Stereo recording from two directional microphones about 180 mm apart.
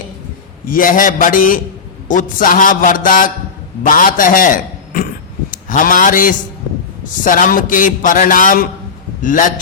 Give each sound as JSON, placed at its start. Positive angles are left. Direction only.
{"t": 0.7, "sound": "a man's voice", "side_deg": 50}